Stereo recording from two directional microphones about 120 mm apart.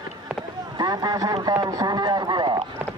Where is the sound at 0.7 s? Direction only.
35° right (ahead or behind).